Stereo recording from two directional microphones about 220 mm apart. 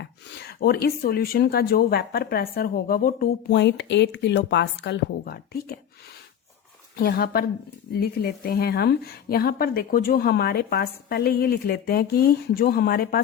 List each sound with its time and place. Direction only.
0.0 s speech: 45° left (ahead or behind)
6.9 s speech: 45° left (ahead or behind)